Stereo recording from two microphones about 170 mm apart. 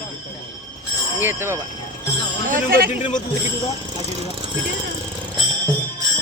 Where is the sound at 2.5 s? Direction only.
60° right (ahead or behind).